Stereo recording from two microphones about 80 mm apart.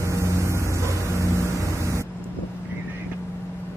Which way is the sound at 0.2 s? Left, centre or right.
Right.